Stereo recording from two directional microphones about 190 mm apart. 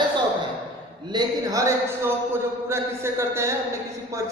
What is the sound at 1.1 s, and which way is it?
A man's voice, 20° right (ahead or behind).